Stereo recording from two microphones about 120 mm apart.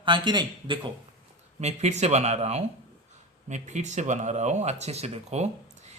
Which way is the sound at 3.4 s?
85° right.